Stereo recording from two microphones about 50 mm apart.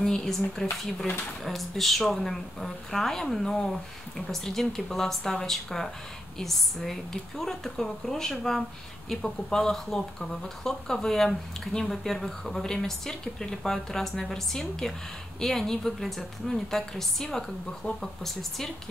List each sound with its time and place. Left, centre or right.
0.0 s a woman's voice: centre